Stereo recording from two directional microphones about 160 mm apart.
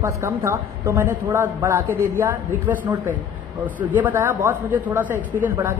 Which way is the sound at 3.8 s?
10° right (ahead or behind).